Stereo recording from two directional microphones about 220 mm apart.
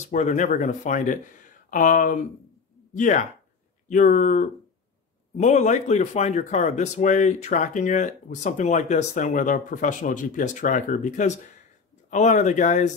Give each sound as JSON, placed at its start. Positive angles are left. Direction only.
{"t": 0.0, "sound": "speech", "side_deg": 30}